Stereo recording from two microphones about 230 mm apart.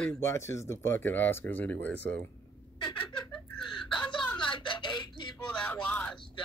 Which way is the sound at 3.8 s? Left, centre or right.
Centre.